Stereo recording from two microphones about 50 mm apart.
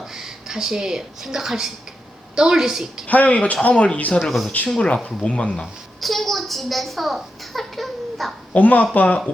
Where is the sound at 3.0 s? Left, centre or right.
Left.